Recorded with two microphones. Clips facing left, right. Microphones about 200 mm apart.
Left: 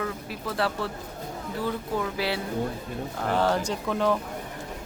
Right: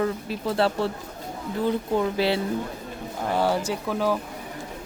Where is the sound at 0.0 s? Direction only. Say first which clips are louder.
Right 6 dB; 30° right (ahead or behind).